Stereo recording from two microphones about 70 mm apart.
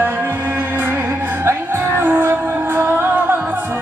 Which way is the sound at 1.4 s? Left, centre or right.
Right.